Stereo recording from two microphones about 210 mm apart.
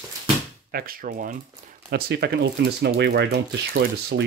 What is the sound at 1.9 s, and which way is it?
Speech, 55° right (ahead or behind).